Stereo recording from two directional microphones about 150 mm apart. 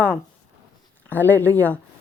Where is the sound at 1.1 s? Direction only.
15° left (ahead or behind).